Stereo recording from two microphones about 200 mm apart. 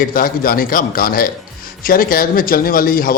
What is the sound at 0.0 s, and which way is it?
A man's voice, 45° left (ahead or behind).